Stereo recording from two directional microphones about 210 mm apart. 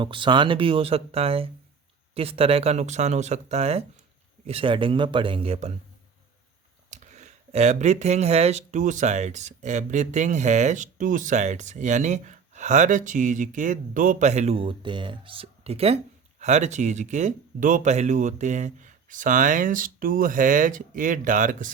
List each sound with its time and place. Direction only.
0.0 s speech: 25° right (ahead or behind)
6.9 s speech: 35° right (ahead or behind)